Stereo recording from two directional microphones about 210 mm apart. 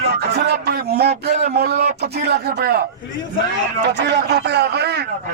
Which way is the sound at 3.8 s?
55° right (ahead or behind).